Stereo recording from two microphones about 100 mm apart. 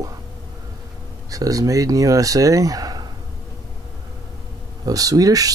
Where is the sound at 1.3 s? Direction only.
35° right (ahead or behind).